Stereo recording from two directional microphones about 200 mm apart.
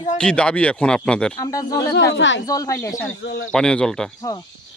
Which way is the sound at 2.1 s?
65° left (ahead or behind).